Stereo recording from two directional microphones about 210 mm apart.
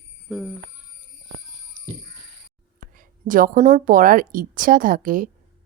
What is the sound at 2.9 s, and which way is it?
A woman's voice, 40° right (ahead or behind).